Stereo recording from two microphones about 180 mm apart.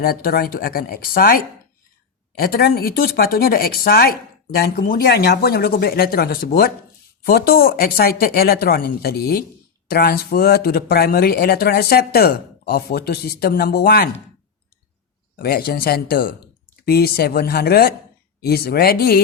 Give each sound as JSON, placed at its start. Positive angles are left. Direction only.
{"t": 0.0, "sound": "speech", "side_deg": 55}
{"t": 15.4, "sound": "speech", "side_deg": 60}